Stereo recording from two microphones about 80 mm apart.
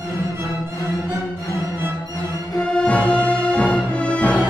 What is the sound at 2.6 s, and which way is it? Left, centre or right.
Music, centre.